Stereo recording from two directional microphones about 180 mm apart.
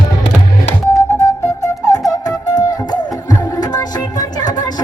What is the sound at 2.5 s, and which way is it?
Music, 20° left (ahead or behind).